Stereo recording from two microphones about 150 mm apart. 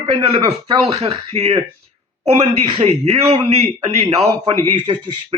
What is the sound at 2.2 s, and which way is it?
Speech, centre (ahead or behind).